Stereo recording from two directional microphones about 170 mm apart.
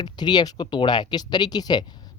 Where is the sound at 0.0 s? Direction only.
25° left (ahead or behind).